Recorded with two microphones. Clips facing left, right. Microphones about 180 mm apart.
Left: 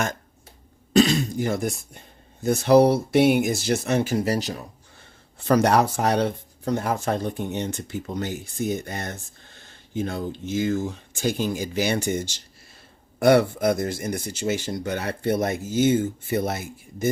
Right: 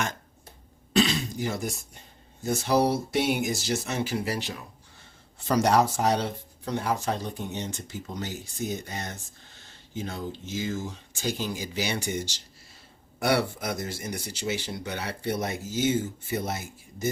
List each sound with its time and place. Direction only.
0.9 s speech: 45° left (ahead or behind)
5.5 s speech: 60° left (ahead or behind)